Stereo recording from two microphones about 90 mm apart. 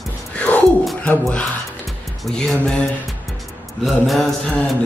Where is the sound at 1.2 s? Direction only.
10° left (ahead or behind).